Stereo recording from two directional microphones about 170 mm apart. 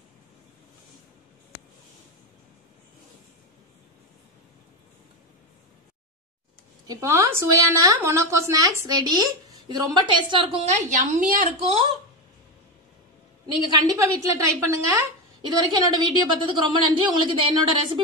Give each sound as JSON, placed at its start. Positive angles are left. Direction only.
{"t": 6.9, "sound": "a woman's voice", "side_deg": -20}
{"t": 13.7, "sound": "a woman's voice", "side_deg": -20}